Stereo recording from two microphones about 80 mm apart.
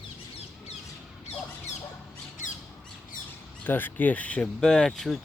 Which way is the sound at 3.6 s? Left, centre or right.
Left.